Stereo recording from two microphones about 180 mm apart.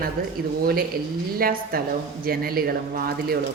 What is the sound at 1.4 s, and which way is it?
A woman's voice, 55° right (ahead or behind).